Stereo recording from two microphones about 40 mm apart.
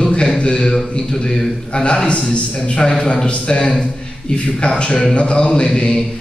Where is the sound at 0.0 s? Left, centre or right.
Left.